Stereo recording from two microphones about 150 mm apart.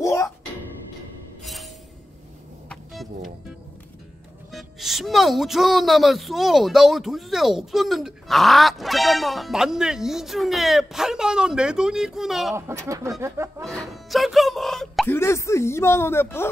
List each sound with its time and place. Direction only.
0.0 s music: 20° left (ahead or behind)
1.4 s music: centre (ahead or behind)
2.7 s music: centre (ahead or behind)
4.5 s speech: centre (ahead or behind)
12.5 s speech: 15° right (ahead or behind)
13.7 s music: centre (ahead or behind)
15.0 s speech: 15° left (ahead or behind)